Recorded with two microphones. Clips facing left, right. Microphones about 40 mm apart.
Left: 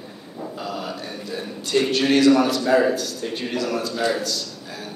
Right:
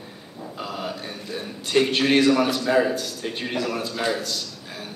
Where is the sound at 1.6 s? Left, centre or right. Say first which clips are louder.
Even; right.